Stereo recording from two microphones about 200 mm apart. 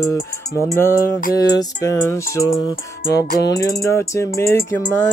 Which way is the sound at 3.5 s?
20° left (ahead or behind).